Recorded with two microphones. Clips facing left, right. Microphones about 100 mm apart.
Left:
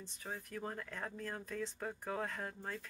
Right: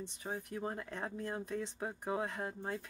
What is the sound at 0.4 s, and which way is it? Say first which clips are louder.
Speech: right 3 dB; 20° right (ahead or behind).